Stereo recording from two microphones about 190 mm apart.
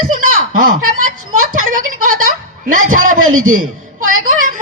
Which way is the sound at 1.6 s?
45° right (ahead or behind).